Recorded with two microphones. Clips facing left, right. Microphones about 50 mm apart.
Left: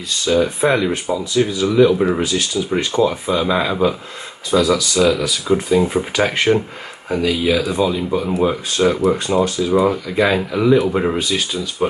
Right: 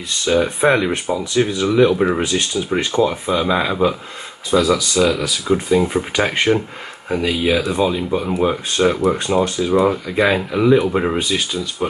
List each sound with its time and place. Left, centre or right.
0.2 s speech: centre
1.1 s speech: right
1.8 s speech: centre
2.7 s speech: centre